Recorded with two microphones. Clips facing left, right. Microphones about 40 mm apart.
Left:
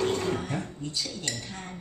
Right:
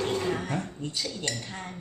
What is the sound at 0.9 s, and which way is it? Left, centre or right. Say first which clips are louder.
Cutlery: right 2 dB; right.